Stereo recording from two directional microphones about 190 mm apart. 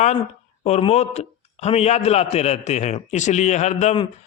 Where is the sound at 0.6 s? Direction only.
35° left (ahead or behind).